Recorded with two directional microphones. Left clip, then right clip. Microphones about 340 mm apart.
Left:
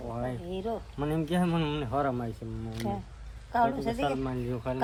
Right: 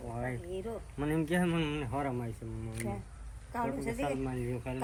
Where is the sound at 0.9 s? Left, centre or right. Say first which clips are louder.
Even; centre.